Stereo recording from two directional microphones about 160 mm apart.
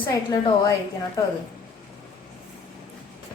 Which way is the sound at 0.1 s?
25° left (ahead or behind).